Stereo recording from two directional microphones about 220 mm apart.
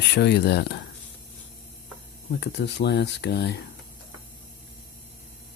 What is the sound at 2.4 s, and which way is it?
Speech, 50° left (ahead or behind).